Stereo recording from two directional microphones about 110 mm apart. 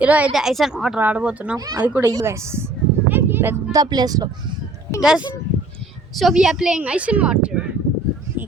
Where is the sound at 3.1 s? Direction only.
20° right (ahead or behind).